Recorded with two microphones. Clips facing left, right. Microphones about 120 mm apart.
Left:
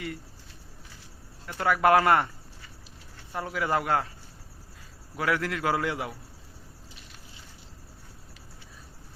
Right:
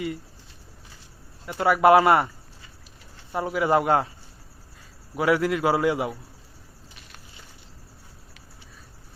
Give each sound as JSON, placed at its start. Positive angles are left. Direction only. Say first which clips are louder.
{"t": 1.5, "sound": "a man's voice", "louder": "right 5 dB", "side_deg": -15}
{"t": 3.3, "sound": "speech", "louder": "right 6 dB", "side_deg": -15}
{"t": 5.1, "sound": "a man's voice", "louder": "right 6 dB", "side_deg": -15}